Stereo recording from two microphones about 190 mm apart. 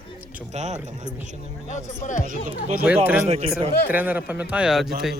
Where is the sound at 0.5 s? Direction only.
35° right (ahead or behind).